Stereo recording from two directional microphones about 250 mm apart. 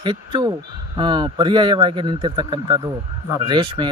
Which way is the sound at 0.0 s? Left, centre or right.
Centre.